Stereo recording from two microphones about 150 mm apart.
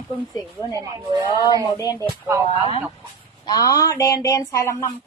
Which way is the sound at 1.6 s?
25° left (ahead or behind).